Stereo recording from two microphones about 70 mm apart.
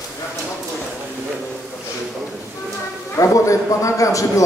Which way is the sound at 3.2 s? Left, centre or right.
Left.